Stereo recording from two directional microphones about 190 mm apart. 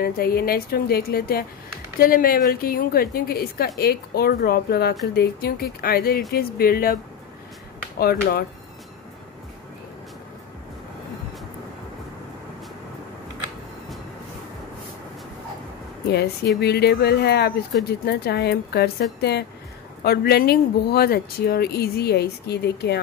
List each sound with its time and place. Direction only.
0.0 s a woman's voice: 55° left (ahead or behind)
8.0 s a woman's voice: 50° left (ahead or behind)
16.6 s speech: 60° left (ahead or behind)